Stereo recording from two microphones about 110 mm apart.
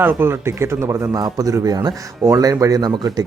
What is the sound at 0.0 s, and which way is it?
Speech, 20° right (ahead or behind).